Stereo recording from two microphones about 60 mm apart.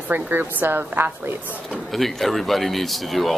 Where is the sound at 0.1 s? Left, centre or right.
Right.